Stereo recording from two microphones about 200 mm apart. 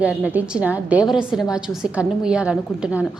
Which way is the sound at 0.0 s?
5° right (ahead or behind).